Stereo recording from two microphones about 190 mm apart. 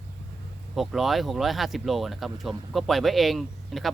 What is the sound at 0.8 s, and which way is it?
Speech, centre (ahead or behind).